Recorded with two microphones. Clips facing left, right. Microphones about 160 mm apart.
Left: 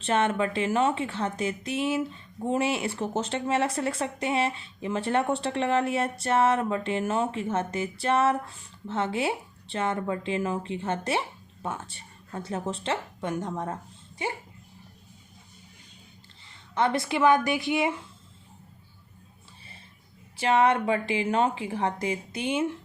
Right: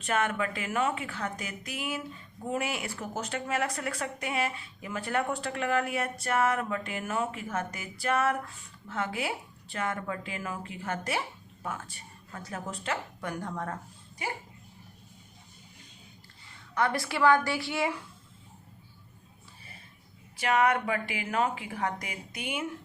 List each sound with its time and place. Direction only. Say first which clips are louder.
0.0 s speech: left 4 dB; 25° left (ahead or behind)
16.7 s speech: left 4 dB; 25° left (ahead or behind)
20.3 s speech: left 3 dB; 30° left (ahead or behind)